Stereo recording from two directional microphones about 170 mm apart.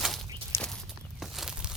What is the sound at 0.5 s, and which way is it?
Walk, 15° left (ahead or behind).